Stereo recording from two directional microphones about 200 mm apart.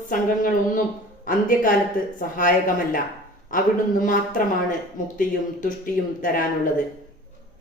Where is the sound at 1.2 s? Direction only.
45° left (ahead or behind).